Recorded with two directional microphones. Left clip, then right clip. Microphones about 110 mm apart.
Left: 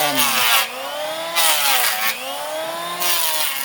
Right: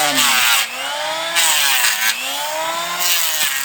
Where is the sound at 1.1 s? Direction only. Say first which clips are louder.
Right 2 dB; 25° left (ahead or behind).